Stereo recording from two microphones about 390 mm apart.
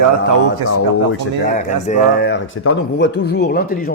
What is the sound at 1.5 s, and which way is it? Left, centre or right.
Speech, centre.